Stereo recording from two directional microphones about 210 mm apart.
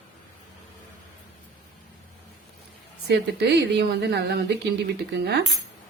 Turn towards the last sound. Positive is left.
turn(degrees=-50)  # may be behind; listen again after turning